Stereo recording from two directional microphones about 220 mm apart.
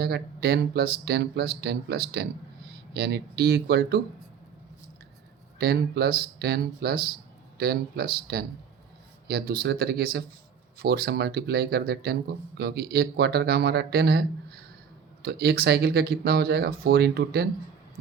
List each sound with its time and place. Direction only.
0.0 s speech: 50° right (ahead or behind)
5.5 s speech: 45° right (ahead or behind)